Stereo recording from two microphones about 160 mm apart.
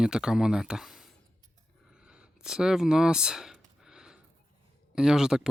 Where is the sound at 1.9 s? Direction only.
5° right (ahead or behind).